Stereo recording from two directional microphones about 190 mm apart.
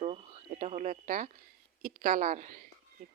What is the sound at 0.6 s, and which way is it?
A woman's voice, 40° right (ahead or behind).